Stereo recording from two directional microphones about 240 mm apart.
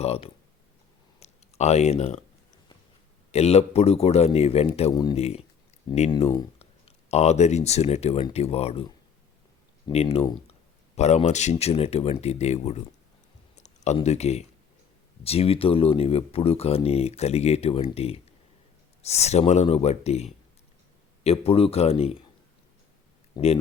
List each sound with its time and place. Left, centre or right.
0.0 s speech: left
3.3 s speech: left
9.9 s speech: left
23.3 s speech: left